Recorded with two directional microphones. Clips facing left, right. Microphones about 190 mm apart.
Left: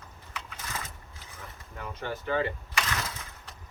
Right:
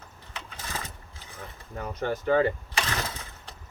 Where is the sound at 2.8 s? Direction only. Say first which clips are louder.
Right 2 dB; 30° right (ahead or behind).